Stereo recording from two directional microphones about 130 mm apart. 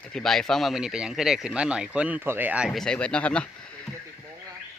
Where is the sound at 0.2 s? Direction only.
5° left (ahead or behind); by 2.6 s 15° right (ahead or behind).